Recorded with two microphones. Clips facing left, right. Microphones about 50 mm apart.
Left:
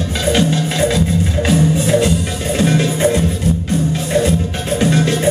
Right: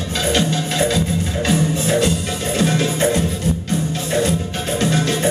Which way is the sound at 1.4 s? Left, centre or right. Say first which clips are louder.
Left 3 dB; centre.